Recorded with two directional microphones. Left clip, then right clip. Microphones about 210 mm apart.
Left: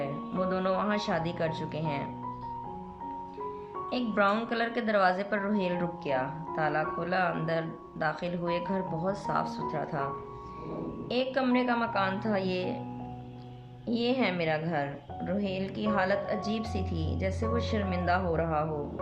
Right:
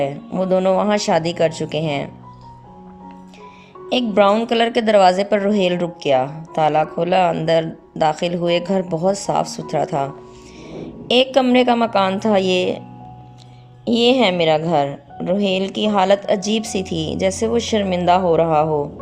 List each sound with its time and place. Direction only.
0.0 s a woman's voice: 35° right (ahead or behind)
3.8 s a woman's voice: 30° right (ahead or behind)
11.1 s a woman's voice: 35° right (ahead or behind)
13.8 s a woman's voice: 35° right (ahead or behind)